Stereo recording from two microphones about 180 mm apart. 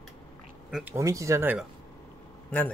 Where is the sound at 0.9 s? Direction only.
15° right (ahead or behind).